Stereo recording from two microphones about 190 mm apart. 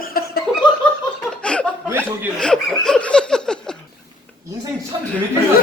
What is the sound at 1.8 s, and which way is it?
Chuckle, 10° right (ahead or behind).